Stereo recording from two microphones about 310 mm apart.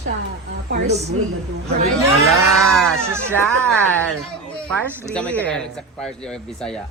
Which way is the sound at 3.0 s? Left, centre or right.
Centre.